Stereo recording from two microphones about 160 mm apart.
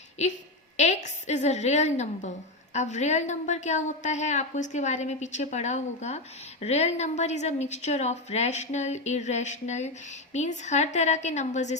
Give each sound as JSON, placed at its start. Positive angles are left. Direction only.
{"t": 0.8, "sound": "a woman's voice", "side_deg": 45}